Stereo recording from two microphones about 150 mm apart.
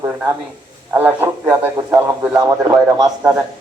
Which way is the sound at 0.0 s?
15° right (ahead or behind).